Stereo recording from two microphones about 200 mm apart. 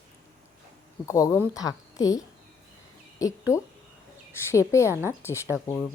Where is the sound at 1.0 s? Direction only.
15° left (ahead or behind).